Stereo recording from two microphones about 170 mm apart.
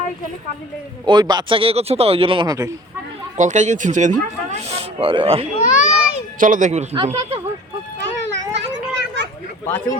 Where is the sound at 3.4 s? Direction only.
45° right (ahead or behind).